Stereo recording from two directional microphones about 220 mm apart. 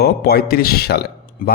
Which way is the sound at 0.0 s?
45° left (ahead or behind).